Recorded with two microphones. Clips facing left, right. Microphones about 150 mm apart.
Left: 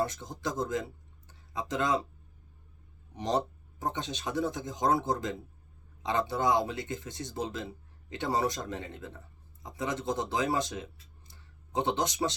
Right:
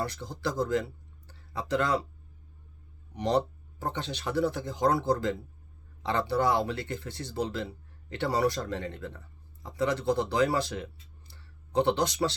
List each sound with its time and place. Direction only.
0.0 s speech: 20° left (ahead or behind)
1.3 s a sound: 20° left (ahead or behind)
3.2 s speech: 20° left (ahead or behind)